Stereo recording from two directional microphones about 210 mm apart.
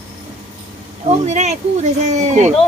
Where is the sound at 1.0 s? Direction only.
35° right (ahead or behind).